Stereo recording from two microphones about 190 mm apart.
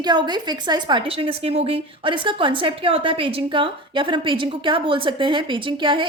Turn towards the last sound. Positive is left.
turn(degrees=-25)  # may be behind; listen again after turning